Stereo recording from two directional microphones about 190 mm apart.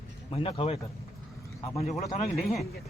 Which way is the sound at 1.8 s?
35° left (ahead or behind).